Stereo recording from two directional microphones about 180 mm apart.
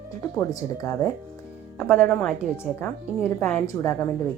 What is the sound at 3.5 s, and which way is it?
Speech, 15° left (ahead or behind).